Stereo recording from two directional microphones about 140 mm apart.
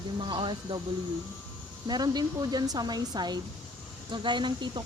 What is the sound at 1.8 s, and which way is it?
Speech, 30° right (ahead or behind).